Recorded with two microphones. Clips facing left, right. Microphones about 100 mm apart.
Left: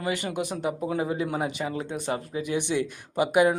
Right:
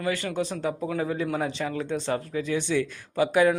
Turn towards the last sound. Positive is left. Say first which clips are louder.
# even
turn(degrees=20)  # may be behind; listen again after turning